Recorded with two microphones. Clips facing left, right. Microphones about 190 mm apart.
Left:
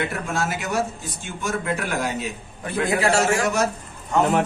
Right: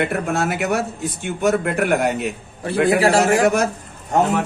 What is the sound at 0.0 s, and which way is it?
Speech, 60° right (ahead or behind).